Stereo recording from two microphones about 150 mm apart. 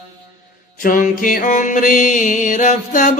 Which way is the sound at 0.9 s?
65° left (ahead or behind).